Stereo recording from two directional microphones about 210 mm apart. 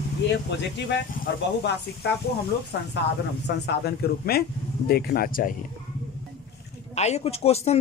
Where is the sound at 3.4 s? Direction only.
50° left (ahead or behind).